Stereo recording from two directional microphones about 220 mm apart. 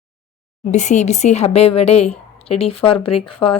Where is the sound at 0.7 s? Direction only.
30° left (ahead or behind).